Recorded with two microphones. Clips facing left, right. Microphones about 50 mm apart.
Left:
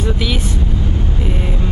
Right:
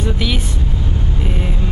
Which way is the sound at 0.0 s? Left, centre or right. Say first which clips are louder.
Left 1 dB; centre.